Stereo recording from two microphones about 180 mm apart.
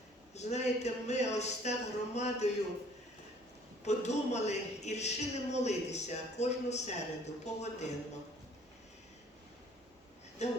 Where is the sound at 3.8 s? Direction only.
40° left (ahead or behind).